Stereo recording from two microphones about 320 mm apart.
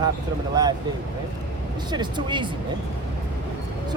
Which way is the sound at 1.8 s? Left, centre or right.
Centre.